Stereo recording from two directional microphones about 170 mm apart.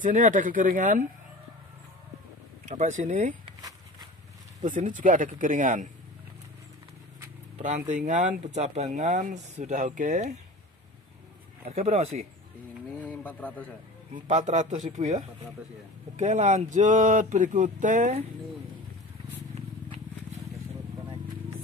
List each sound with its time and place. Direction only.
0.0 s speech: 50° right (ahead or behind)
2.6 s speech: 45° right (ahead or behind)
4.6 s speech: 50° right (ahead or behind)
7.5 s speech: 45° right (ahead or behind)
11.6 s speech: 35° right (ahead or behind)
13.0 s speech: 10° left (ahead or behind)
14.1 s speech: 45° right (ahead or behind)